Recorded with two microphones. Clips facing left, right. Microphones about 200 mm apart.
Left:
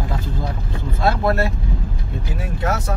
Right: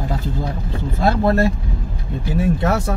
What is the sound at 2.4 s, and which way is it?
Speech, 30° right (ahead or behind).